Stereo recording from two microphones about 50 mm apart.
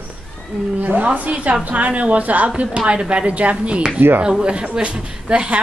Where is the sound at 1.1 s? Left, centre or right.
Right.